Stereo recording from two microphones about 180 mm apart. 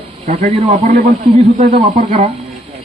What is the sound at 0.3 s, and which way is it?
Speech, 35° right (ahead or behind).